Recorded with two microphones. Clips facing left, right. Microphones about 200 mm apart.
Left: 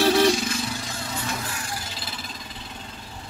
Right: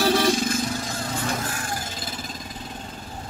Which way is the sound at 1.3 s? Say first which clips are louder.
Right 3 dB; 50° right (ahead or behind).